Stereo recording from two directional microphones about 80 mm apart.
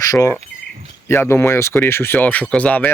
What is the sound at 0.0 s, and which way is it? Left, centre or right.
Speech, left.